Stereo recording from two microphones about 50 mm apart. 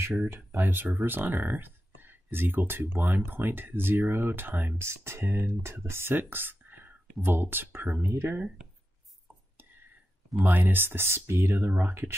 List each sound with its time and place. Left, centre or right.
0.5 s speech: right
4.7 s speech: right
10.4 s speech: right
11.6 s speech: right